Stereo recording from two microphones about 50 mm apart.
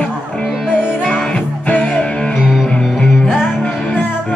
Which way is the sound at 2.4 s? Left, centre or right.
Centre.